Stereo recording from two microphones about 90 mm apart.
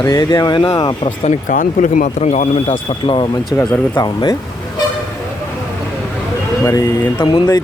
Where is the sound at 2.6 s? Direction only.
90° left; by 4.3 s 50° left (ahead or behind).